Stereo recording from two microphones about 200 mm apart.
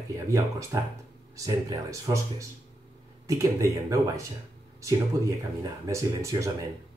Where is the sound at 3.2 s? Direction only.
15° right (ahead or behind).